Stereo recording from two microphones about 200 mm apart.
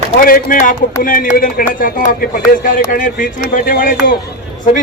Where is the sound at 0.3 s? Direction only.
45° left (ahead or behind).